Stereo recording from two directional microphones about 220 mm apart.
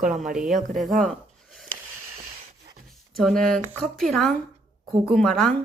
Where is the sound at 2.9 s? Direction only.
Centre (ahead or behind).